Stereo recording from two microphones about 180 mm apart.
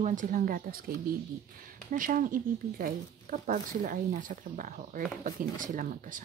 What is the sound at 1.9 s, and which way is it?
Speech, 50° right (ahead or behind).